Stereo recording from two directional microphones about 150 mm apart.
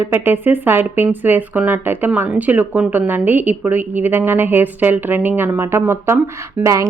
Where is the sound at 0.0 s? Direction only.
15° right (ahead or behind).